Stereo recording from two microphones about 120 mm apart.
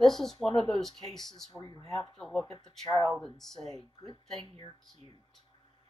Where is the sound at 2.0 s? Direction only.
5° left (ahead or behind).